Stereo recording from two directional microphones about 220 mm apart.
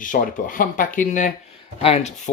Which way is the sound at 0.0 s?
35° left (ahead or behind).